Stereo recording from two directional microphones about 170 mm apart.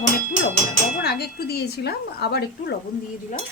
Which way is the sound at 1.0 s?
70° left (ahead or behind).